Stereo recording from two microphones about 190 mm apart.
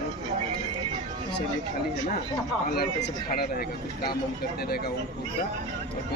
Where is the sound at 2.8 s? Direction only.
55° left (ahead or behind).